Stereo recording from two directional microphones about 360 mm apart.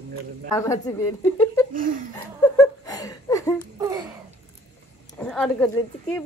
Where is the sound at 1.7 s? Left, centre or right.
Right.